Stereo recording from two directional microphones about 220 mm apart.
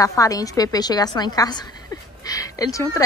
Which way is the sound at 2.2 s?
15° left (ahead or behind).